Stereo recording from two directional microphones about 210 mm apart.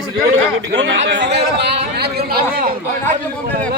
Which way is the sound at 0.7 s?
60° right (ahead or behind).